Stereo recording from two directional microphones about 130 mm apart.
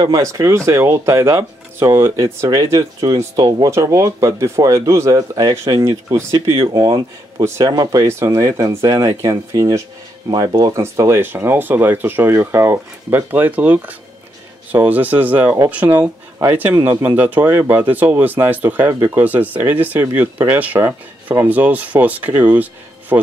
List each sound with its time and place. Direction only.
0.1 s speech: 25° right (ahead or behind)